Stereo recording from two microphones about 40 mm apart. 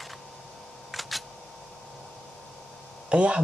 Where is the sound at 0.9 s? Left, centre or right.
Centre.